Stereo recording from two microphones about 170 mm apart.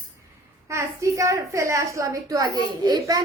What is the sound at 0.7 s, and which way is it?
A woman's voice, 15° right (ahead or behind).